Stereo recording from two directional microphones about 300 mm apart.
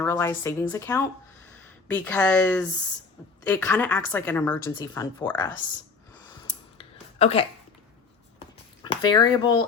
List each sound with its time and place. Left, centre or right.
0.0 s a woman's voice: centre
7.2 s speech: left
8.4 s a sound: centre